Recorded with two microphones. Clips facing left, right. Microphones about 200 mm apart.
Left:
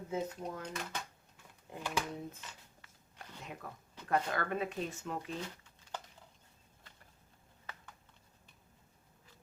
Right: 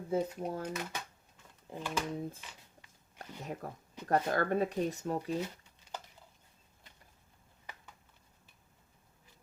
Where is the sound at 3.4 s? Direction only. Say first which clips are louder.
Right 6 dB; 40° right (ahead or behind).